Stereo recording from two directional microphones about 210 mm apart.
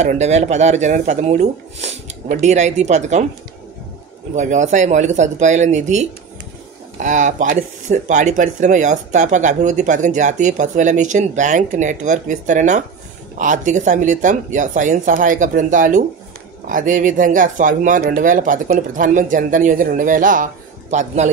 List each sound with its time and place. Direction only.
0.0 s speech: 35° right (ahead or behind)
4.4 s speech: 35° right (ahead or behind)